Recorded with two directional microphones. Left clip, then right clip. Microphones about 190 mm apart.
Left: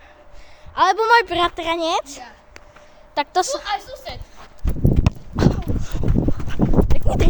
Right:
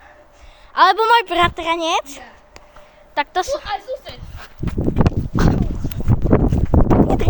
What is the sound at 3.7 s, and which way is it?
Speech, 75° left (ahead or behind).